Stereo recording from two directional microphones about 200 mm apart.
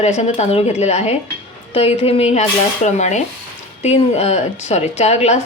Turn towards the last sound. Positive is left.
turn(degrees=35)  # may be behind; listen again after turning